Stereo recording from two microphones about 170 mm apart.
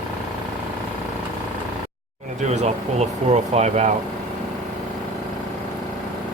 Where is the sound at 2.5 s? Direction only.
40° right (ahead or behind).